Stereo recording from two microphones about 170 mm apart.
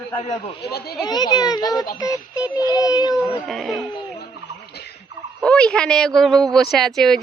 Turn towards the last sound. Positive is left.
turn(degrees=0)  # may be behind; listen again after turning